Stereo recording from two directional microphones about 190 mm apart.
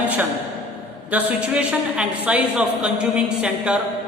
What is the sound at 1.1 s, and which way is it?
A woman's voice, 5° right (ahead or behind).